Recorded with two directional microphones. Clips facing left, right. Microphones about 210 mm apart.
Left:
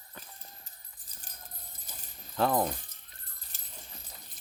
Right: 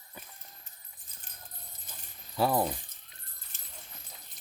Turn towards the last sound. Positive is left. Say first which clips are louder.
# left 1 dB
turn(degrees=35)  # may be behind; listen again after turning